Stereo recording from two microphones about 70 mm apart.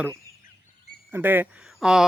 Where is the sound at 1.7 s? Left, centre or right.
Centre.